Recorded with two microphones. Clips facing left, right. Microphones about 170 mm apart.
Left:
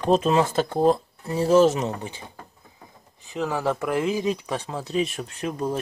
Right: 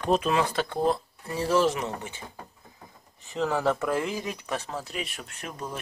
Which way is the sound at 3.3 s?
10° left (ahead or behind).